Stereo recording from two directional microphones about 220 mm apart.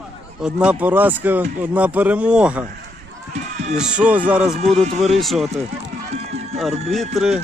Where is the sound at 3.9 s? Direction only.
5° right (ahead or behind).